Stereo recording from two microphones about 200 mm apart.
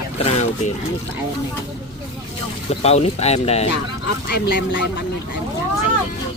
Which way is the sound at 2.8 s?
30° left (ahead or behind).